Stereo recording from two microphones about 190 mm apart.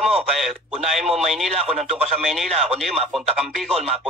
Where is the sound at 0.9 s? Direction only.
Centre (ahead or behind).